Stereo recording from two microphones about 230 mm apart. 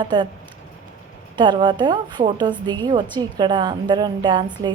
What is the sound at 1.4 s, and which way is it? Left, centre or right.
A woman's voice, centre.